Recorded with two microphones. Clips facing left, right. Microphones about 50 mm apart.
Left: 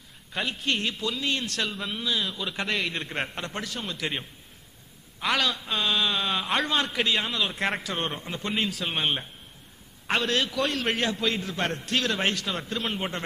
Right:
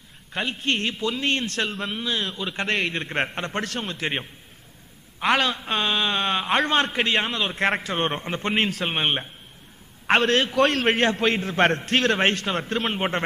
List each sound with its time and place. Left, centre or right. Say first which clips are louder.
0.3 s a man's voice: right 3 dB; right
2.5 s a man's voice: right 5 dB; right